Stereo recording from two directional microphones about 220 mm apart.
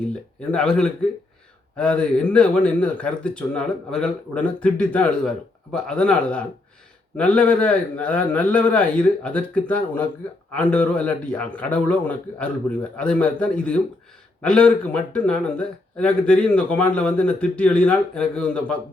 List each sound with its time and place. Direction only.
0.5 s a man's voice: 5° left (ahead or behind)